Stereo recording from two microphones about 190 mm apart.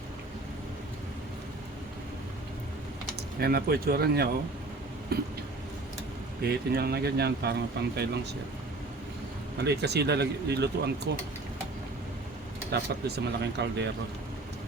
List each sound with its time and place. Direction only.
3.4 s speech: 50° right (ahead or behind)
6.4 s speech: 55° right (ahead or behind)
9.6 s speech: 60° right (ahead or behind)
12.7 s speech: 60° right (ahead or behind)